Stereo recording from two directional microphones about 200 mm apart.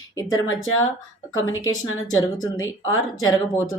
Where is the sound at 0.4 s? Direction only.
80° left.